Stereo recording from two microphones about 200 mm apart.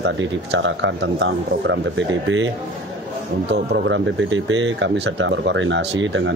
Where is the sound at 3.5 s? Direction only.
60° right (ahead or behind).